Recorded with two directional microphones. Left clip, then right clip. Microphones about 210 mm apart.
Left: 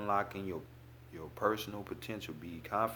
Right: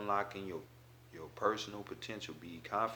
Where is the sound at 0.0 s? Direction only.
45° left (ahead or behind).